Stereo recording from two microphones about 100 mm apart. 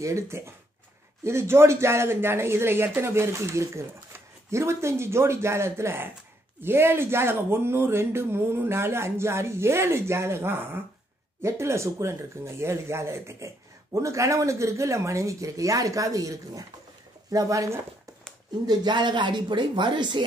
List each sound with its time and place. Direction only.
0.0 s speech: 30° right (ahead or behind)
18.7 s speech: 50° right (ahead or behind)